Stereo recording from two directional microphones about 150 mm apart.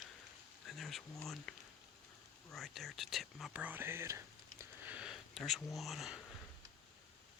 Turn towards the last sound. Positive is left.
turn(degrees=0)  # may be behind; listen again after turning